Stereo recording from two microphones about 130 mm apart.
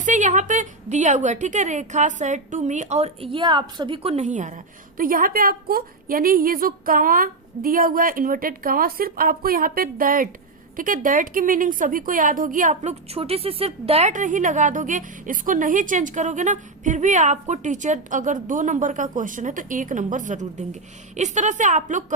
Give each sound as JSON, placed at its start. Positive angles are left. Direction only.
{"t": 0.0, "sound": "a woman's voice", "side_deg": -75}
{"t": 14.1, "sound": "a woman's voice", "side_deg": -75}